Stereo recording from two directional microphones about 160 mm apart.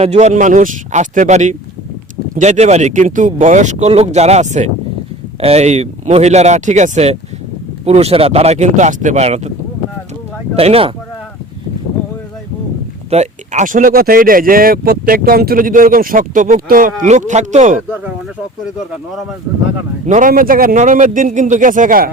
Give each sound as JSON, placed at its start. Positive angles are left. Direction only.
{"t": 0.0, "sound": "speech", "side_deg": -45}
{"t": 10.5, "sound": "speech", "side_deg": -40}
{"t": 13.1, "sound": "speech", "side_deg": -45}
{"t": 17.8, "sound": "speech", "side_deg": -10}
{"t": 20.1, "sound": "speech", "side_deg": -55}